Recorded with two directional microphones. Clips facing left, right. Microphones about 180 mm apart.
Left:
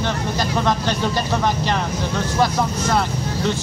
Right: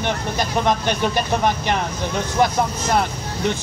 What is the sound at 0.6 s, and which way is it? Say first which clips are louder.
Speech: right 2 dB; 20° right (ahead or behind).